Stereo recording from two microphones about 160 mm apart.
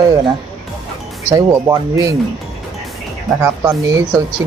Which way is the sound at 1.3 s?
20° right (ahead or behind).